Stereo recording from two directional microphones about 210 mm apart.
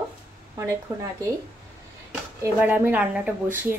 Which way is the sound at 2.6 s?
10° right (ahead or behind).